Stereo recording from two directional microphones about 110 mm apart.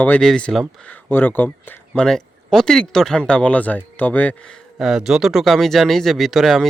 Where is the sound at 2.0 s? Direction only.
5° left (ahead or behind).